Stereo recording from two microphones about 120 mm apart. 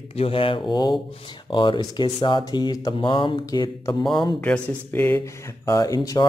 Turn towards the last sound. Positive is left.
turn(degrees=30)  # may be behind; listen again after turning